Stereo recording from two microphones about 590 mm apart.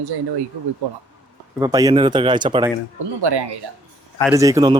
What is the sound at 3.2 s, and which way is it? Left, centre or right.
Speech, right.